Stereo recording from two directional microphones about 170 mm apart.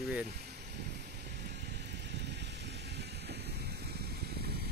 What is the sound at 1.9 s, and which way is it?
Vehicle, 90° right.